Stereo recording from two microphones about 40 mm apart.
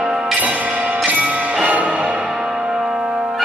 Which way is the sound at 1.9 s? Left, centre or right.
Right.